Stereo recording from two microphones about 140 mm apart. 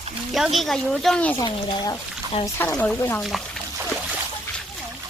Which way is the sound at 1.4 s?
25° left (ahead or behind).